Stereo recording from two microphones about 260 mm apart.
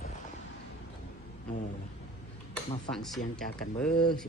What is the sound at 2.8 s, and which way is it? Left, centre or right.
Speech, centre.